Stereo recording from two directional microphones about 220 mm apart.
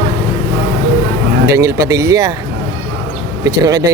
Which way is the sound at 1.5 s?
15° right (ahead or behind).